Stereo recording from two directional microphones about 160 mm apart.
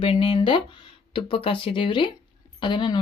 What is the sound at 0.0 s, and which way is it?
Speech, 35° left (ahead or behind).